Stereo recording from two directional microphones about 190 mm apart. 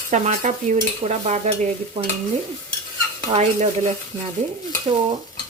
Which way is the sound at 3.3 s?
35° right (ahead or behind).